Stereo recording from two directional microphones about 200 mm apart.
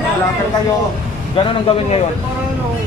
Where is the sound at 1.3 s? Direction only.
30° left (ahead or behind).